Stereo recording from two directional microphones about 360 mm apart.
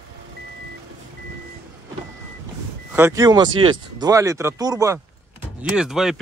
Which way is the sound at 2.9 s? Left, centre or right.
Centre.